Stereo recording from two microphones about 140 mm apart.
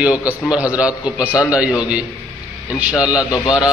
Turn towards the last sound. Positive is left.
turn(degrees=25)  # may be behind; listen again after turning